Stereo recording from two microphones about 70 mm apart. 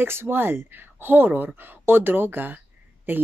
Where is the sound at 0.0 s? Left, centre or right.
Right.